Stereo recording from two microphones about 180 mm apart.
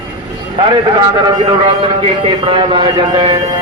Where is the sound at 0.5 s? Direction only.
25° right (ahead or behind).